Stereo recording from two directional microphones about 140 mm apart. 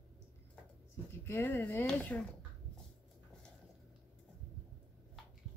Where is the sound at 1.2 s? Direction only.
15° left (ahead or behind).